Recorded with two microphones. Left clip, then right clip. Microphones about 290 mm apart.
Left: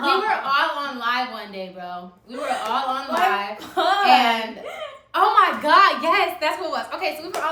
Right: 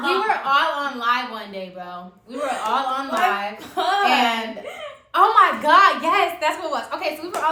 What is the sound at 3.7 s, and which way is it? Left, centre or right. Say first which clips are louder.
Speech: left 2 dB; centre.